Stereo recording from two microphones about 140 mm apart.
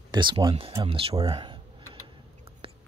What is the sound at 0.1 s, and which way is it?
Speech, 35° right (ahead or behind).